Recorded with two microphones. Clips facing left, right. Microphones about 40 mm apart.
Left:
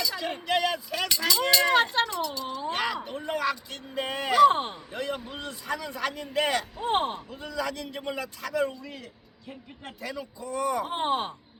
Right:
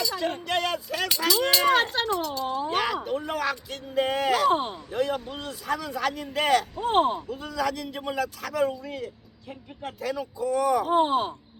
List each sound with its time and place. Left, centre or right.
0.0 s music: centre
0.3 s speech: centre
2.6 s a sound: centre
3.5 s speech: centre
10.8 s speech: left